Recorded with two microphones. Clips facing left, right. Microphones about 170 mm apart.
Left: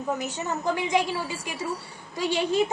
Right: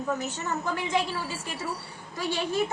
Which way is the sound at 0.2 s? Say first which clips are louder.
Left 2 dB; 15° left (ahead or behind).